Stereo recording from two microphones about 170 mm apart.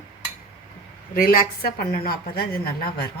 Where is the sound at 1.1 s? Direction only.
60° left (ahead or behind).